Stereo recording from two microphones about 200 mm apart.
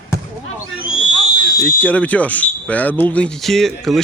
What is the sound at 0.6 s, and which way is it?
Owl, 80° left.